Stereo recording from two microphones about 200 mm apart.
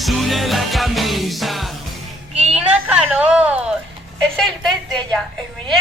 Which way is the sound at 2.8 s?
5° right (ahead or behind).